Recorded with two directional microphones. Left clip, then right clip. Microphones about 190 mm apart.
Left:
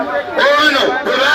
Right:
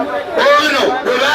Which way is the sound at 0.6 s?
55° right (ahead or behind).